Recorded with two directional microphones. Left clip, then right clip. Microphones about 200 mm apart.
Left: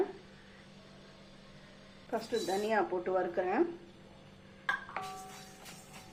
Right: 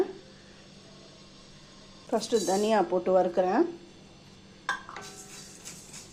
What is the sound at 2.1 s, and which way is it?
Speech, 40° right (ahead or behind).